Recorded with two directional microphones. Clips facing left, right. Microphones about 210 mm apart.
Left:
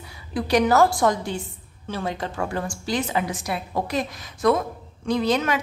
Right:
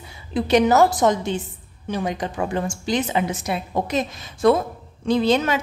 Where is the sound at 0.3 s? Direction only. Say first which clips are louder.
Right 3 dB; 20° right (ahead or behind).